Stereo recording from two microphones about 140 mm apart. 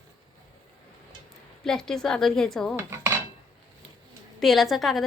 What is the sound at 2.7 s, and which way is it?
Cutlery, 20° right (ahead or behind).